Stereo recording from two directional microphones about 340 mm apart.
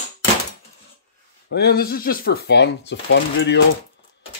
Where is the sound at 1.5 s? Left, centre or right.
Left.